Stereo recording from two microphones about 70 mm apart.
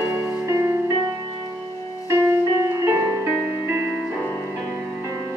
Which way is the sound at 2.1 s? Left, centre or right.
Right.